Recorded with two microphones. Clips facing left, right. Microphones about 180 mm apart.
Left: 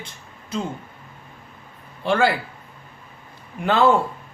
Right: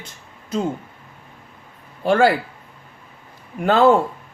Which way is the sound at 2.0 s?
40° right (ahead or behind).